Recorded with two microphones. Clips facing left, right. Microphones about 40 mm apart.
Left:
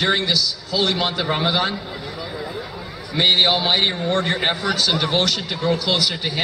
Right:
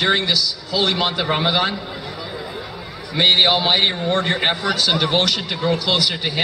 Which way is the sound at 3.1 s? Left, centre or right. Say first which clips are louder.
Right 2 dB; centre.